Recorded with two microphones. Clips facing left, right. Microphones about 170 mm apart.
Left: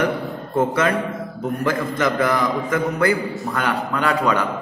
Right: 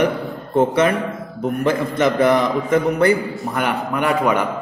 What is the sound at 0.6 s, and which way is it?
A man's voice, 25° right (ahead or behind).